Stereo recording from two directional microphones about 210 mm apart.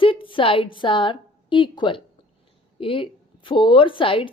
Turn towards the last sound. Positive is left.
turn(degrees=25)  # may be behind; listen again after turning